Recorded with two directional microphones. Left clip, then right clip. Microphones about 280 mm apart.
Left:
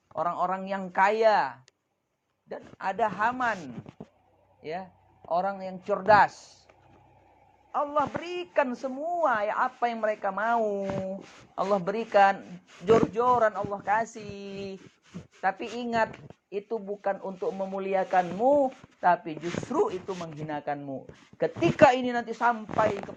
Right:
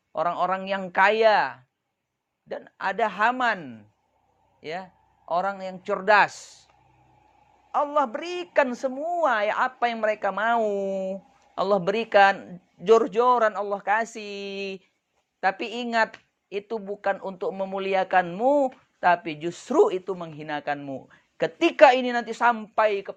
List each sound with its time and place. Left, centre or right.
0.1 s a man's voice: right
4.6 s a man's voice: right
7.7 s a man's voice: right